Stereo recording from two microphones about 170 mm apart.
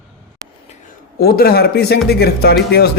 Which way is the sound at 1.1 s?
65° left (ahead or behind).